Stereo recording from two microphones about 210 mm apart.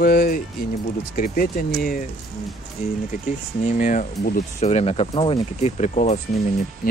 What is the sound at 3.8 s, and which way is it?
Speech, 40° left (ahead or behind).